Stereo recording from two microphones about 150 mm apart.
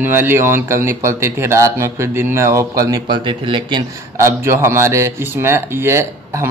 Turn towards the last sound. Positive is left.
turn(degrees=-15)  # may be behind; listen again after turning